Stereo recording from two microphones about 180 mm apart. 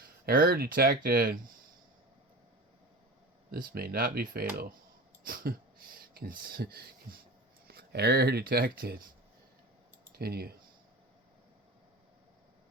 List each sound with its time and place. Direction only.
0.3 s speech: 55° right (ahead or behind)
3.5 s speech: 60° right (ahead or behind)
10.1 s speech: 60° right (ahead or behind)